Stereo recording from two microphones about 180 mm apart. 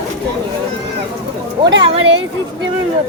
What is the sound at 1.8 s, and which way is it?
Speech, 30° right (ahead or behind).